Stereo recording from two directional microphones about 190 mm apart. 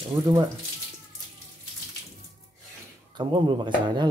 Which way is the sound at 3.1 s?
25° right (ahead or behind).